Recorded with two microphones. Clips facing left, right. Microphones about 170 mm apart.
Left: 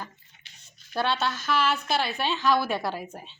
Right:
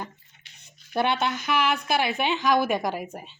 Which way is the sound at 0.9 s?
20° right (ahead or behind).